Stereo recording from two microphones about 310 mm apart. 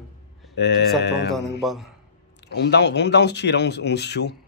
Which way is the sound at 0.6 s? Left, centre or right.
Left.